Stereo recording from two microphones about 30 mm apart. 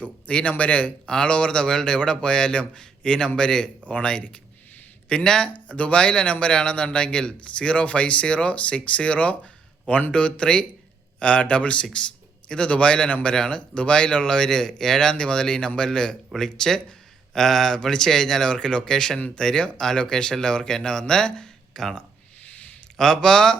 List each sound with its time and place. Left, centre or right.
0.3 s speech: left
1.0 s a man's voice: left
5.0 s speech: left
5.5 s speech: left
5.9 s a man's voice: left
21.7 s speech: centre
22.4 s a sound: left
23.0 s speech: centre